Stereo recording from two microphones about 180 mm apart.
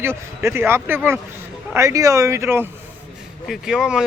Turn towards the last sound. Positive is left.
turn(degrees=-5)  # may be behind; listen again after turning